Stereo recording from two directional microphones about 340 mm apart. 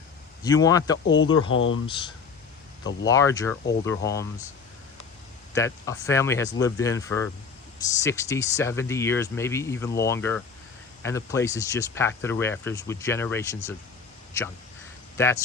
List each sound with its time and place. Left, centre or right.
0.4 s speech: centre
1.0 s speech: left
1.9 s speech: centre
5.5 s speech: centre